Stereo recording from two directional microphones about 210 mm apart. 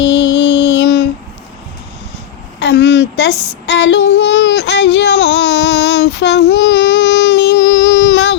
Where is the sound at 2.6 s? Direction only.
55° left (ahead or behind).